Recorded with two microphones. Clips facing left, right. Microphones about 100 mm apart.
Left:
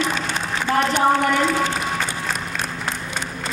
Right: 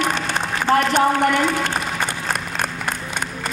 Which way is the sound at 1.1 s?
55° right (ahead or behind).